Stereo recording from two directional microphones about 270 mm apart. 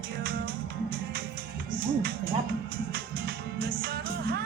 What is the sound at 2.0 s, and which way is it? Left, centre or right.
Music, right.